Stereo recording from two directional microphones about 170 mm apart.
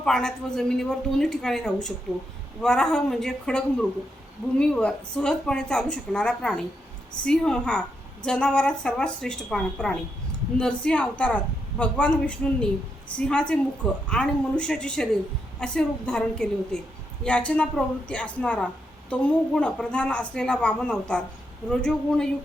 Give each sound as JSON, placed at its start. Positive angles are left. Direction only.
{"t": 0.0, "sound": "a woman's voice", "side_deg": 5}